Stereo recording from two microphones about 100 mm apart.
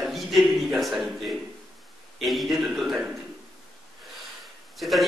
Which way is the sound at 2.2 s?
Centre (ahead or behind).